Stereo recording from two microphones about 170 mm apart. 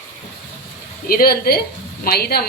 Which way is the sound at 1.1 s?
60° left (ahead or behind).